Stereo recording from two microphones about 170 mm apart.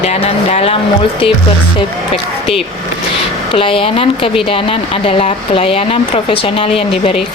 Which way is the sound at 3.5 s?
30° left (ahead or behind).